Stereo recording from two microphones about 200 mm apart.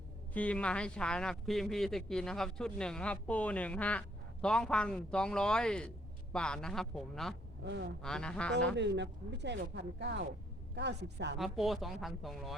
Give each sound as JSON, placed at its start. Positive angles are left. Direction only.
{"t": 0.3, "sound": "speech", "side_deg": 5}
{"t": 7.6, "sound": "speech", "side_deg": -60}
{"t": 8.0, "sound": "speech", "side_deg": 5}
{"t": 8.7, "sound": "speech", "side_deg": -60}
{"t": 11.3, "sound": "speech", "side_deg": 0}